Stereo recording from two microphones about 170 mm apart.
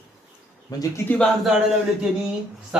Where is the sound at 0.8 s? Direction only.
10° left (ahead or behind).